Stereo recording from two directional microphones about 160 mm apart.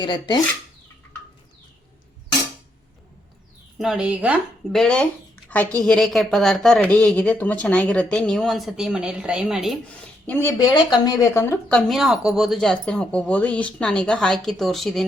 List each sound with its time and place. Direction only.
0.0 s speech: 30° left (ahead or behind)
3.8 s speech: 5° right (ahead or behind)
4.8 s speech: 5° left (ahead or behind)
10.2 s speech: 15° left (ahead or behind)
11.7 s speech: centre (ahead or behind)